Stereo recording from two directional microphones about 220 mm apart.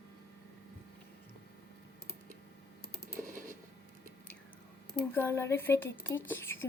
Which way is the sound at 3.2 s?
35° right (ahead or behind).